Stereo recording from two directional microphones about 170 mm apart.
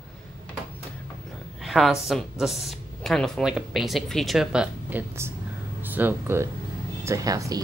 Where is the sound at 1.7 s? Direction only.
Centre (ahead or behind).